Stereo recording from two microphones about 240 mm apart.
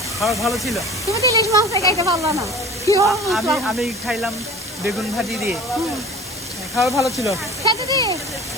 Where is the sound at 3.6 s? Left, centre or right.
Centre.